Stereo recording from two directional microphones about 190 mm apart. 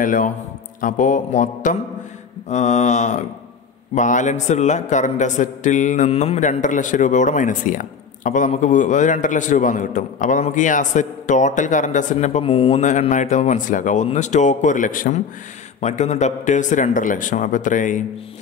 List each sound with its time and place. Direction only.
0.0 s a man's voice: 45° left (ahead or behind)